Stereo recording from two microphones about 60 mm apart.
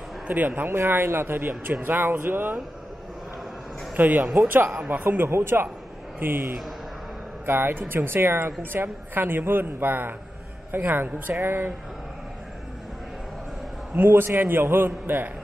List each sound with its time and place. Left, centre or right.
0.3 s a woman's voice: right
3.9 s a woman's voice: right
13.9 s a woman's voice: right